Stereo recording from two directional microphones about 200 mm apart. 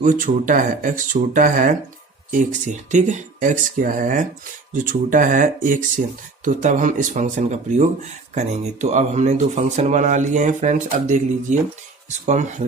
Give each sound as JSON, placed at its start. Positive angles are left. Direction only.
{"t": 0.0, "sound": "speech", "side_deg": -40}